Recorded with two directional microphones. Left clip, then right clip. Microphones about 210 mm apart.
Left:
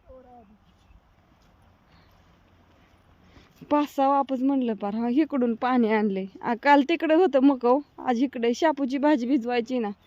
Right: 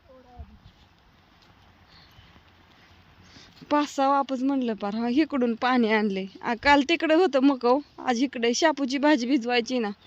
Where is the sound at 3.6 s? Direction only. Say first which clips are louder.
Even; 10° left (ahead or behind).